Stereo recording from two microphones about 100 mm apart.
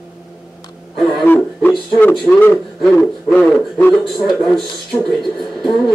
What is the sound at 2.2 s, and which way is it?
Speech, 20° left (ahead or behind).